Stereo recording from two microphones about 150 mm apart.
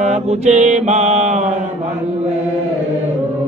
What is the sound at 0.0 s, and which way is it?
Mantra, 50° right (ahead or behind).